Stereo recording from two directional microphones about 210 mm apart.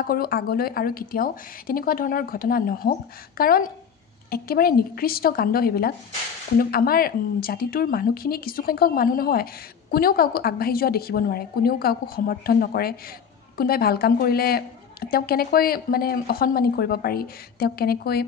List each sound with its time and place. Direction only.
0.0 s speech: 45° left (ahead or behind)